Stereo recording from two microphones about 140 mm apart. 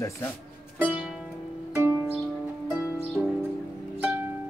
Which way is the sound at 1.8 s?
15° right (ahead or behind).